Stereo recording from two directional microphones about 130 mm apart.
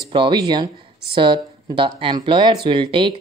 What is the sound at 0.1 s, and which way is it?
Speech, 40° right (ahead or behind).